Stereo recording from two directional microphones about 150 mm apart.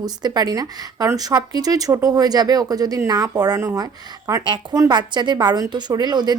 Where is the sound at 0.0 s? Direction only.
25° right (ahead or behind).